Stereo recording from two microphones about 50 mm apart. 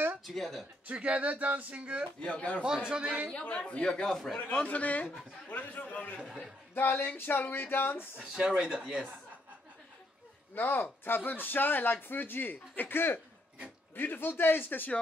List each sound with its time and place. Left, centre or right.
0.2 s speech: centre
0.8 s speech: right
2.2 s speech: left
2.6 s speech: centre
3.3 s speech: left
4.1 s speech: centre
4.6 s a man's voice: left
6.7 s speech: left
8.2 s speech: centre
10.5 s a man's voice: left